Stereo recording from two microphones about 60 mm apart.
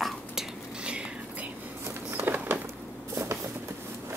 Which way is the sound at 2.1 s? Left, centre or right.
Right.